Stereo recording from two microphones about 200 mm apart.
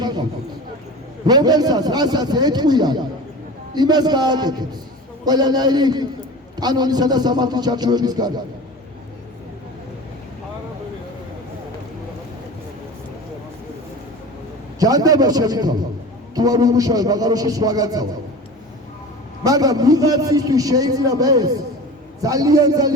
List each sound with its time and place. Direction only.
0.0 s a sound: 20° right (ahead or behind)
1.3 s music: 20° right (ahead or behind)
14.8 s music: 20° right (ahead or behind)
19.5 s a man's voice: 20° right (ahead or behind)
22.2 s music: 20° right (ahead or behind)